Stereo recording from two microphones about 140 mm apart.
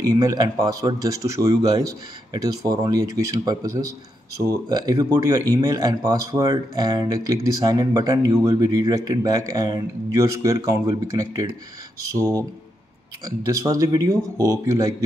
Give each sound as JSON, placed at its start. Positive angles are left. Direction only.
{"t": 0.0, "sound": "a man's voice", "side_deg": -25}